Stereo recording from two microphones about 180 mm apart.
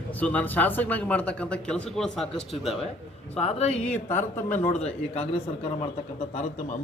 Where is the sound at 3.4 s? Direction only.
35° left (ahead or behind).